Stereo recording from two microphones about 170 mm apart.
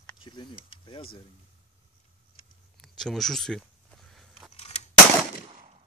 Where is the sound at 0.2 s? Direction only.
30° left (ahead or behind).